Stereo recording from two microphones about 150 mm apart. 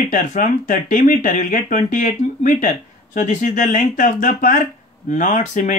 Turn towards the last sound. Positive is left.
turn(degrees=60)  # may be behind; listen again after turning